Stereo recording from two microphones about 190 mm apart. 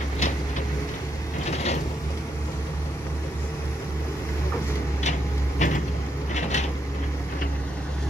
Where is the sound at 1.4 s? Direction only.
35° left (ahead or behind).